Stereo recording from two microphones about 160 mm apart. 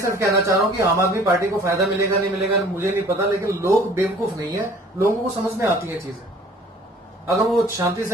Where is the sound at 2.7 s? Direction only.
15° right (ahead or behind).